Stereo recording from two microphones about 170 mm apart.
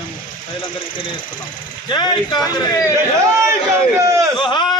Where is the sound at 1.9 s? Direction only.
25° left (ahead or behind).